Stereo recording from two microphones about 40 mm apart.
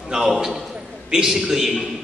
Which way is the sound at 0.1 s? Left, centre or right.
Centre.